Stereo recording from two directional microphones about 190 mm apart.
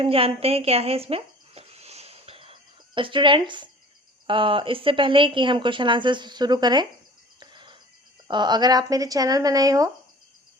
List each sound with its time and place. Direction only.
0.0 s music: 30° right (ahead or behind)
4.3 s speech: 25° right (ahead or behind)
7.3 s cricket: 25° right (ahead or behind)
8.3 s speech: 25° right (ahead or behind)